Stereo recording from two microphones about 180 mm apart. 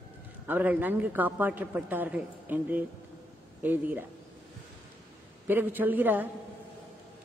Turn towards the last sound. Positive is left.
turn(degrees=-10)  # may be behind; listen again after turning